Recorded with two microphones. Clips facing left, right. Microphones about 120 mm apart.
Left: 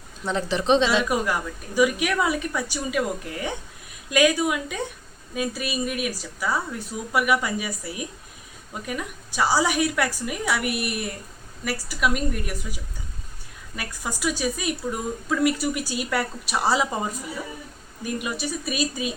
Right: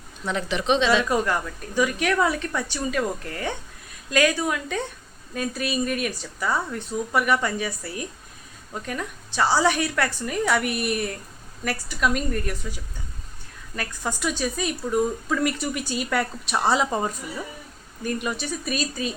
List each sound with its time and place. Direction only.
0.3 s a woman's voice: 35° left (ahead or behind)
0.9 s a woman's voice: 10° left (ahead or behind)